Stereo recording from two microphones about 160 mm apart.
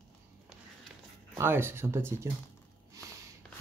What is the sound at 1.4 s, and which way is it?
Speech, 15° right (ahead or behind).